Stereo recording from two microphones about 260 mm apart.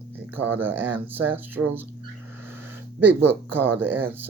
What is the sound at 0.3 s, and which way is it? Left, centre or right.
Speech, centre.